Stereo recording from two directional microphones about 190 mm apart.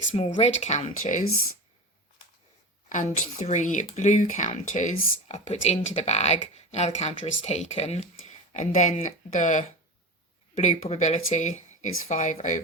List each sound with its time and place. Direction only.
0.1 s speech: 35° left (ahead or behind)
2.9 s speech: 40° left (ahead or behind)